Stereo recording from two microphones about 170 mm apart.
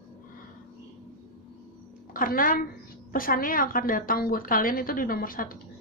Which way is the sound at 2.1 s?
55° left (ahead or behind).